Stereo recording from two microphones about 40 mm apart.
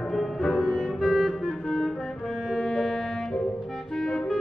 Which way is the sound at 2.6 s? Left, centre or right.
Centre.